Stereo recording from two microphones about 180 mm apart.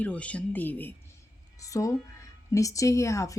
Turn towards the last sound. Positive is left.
turn(degrees=15)  # may be behind; listen again after turning